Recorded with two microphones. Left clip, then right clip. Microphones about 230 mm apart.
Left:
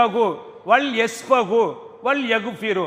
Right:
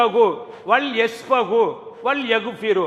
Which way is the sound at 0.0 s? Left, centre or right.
Left.